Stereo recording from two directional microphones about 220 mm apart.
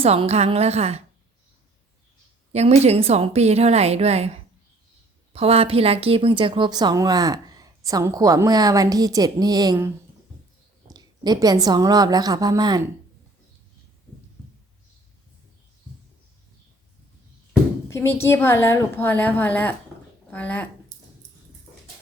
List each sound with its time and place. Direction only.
0.0 s a woman's voice: 30° right (ahead or behind)
2.5 s a woman's voice: 30° right (ahead or behind)
5.3 s a woman's voice: 25° right (ahead or behind)
17.8 s a woman's voice: 10° left (ahead or behind)